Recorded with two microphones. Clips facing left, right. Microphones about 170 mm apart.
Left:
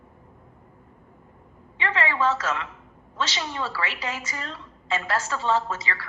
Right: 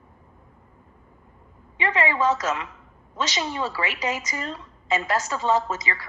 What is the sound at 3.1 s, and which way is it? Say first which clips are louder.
A woman's voice: right 2 dB; 15° right (ahead or behind).